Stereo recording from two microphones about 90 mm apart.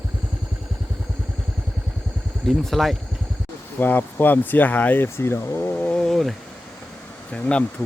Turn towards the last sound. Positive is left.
turn(degrees=15)  # may be behind; listen again after turning